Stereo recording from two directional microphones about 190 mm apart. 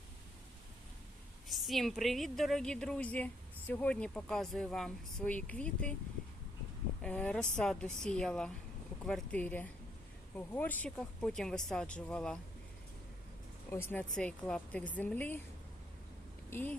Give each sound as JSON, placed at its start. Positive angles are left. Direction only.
{"t": 1.5, "sound": "a woman's voice", "side_deg": 0}
{"t": 7.0, "sound": "a woman's voice", "side_deg": 5}
{"t": 13.7, "sound": "speech", "side_deg": 10}
{"t": 16.5, "sound": "speech", "side_deg": 10}